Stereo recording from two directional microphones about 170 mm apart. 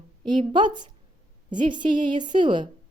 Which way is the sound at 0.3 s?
25° right (ahead or behind).